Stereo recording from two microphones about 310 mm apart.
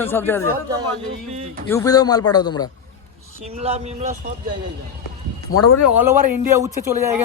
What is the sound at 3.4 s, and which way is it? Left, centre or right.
Speech, centre.